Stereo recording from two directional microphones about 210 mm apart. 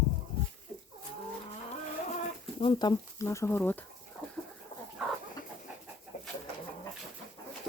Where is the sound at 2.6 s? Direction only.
20° left (ahead or behind).